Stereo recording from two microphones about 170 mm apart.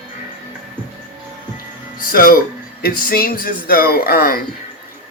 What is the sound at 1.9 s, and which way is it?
Music, 55° left (ahead or behind).